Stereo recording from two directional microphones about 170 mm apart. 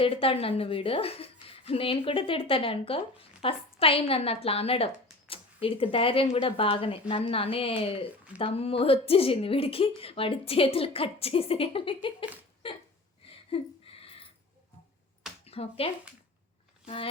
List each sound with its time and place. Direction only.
0.0 s speech: 35° left (ahead or behind)
12.6 s hiccup: 30° left (ahead or behind)
13.9 s a sound: 35° left (ahead or behind)
15.4 s speech: 35° left (ahead or behind)